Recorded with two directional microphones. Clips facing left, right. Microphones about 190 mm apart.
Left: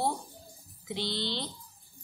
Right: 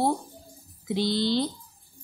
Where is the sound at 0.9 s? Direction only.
40° right (ahead or behind).